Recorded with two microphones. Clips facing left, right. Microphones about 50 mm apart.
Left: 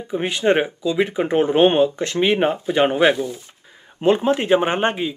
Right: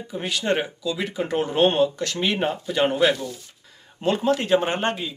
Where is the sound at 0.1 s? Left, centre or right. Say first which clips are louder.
Left 6 dB; left.